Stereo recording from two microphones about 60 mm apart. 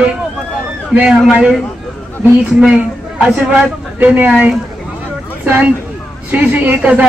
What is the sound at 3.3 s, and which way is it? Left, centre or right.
Speech, centre.